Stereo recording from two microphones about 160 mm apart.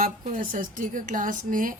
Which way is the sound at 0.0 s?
55° right (ahead or behind).